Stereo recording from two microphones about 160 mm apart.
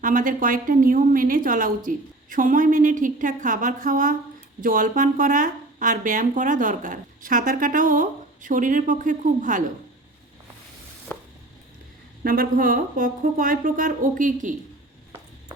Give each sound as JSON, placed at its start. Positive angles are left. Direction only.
{"t": 0.0, "sound": "speech", "side_deg": -55}
{"t": 11.1, "sound": "a sound", "side_deg": 10}
{"t": 12.2, "sound": "speech", "side_deg": -65}